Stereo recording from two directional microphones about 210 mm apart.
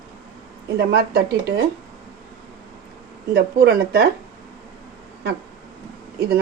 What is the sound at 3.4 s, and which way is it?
Speech, 50° right (ahead or behind).